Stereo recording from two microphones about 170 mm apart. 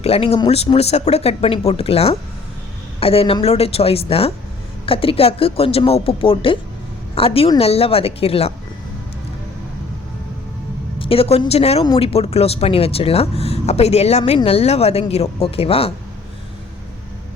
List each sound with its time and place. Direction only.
0.0 s speech: 35° left (ahead or behind)
11.0 s speech: 35° left (ahead or behind)